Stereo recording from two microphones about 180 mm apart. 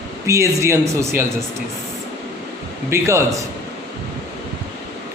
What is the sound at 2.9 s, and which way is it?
Speech, 15° right (ahead or behind).